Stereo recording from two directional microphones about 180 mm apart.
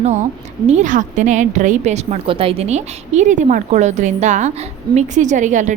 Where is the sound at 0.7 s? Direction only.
45° right (ahead or behind).